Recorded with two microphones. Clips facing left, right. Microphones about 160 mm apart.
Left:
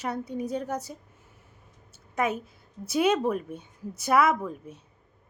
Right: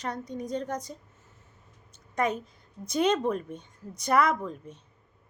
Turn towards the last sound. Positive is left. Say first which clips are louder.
# left 2 dB
turn(degrees=10)  # may be behind; listen again after turning